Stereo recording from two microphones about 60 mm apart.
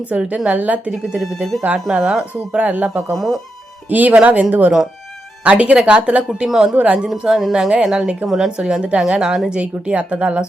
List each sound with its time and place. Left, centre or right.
0.1 s speech: centre
1.2 s a woman's voice: centre
2.3 s speech: right
3.2 s speech: centre
3.8 s speech: right
6.5 s a woman's voice: centre
6.7 s speech: centre
7.3 s speech: centre
7.5 s a woman's voice: centre